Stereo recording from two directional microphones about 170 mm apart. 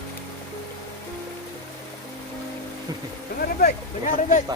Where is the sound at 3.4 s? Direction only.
65° left (ahead or behind).